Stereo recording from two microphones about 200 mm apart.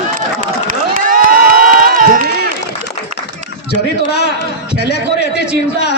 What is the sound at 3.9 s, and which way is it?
A man's voice, 55° left (ahead or behind).